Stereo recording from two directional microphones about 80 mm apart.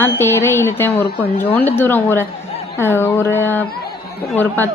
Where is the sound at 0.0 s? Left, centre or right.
Left.